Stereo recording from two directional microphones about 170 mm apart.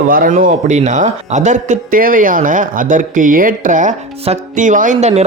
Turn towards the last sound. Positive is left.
turn(degrees=-40)  # may be behind; listen again after turning